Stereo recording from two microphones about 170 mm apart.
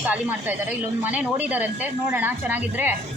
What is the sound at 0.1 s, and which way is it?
A woman's voice, 10° right (ahead or behind).